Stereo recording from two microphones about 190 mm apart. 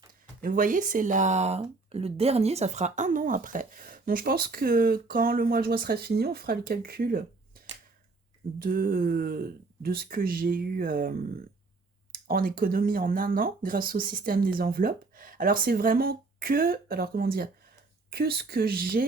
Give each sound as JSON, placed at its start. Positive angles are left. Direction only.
{"t": 0.4, "sound": "speech", "side_deg": -45}